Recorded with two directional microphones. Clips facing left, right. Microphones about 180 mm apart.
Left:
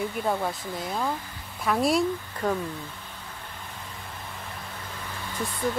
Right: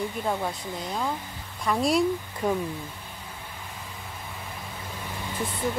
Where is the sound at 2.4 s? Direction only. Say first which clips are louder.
Right 1 dB; 10° right (ahead or behind).